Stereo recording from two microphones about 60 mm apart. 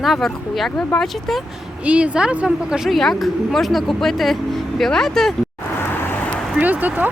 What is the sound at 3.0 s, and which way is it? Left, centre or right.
Speech, centre.